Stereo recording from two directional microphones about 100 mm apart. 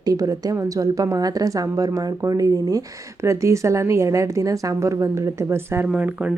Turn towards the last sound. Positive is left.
turn(degrees=-15)  # may be behind; listen again after turning